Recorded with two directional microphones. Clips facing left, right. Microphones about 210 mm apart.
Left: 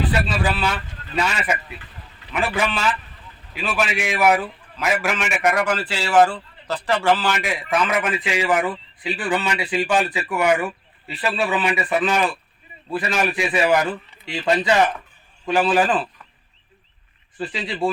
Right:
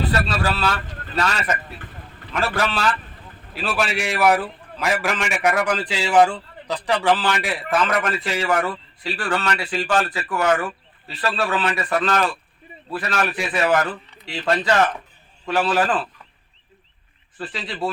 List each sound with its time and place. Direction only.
0.1 s a man's voice: 15° left (ahead or behind)
17.8 s speech: 25° left (ahead or behind)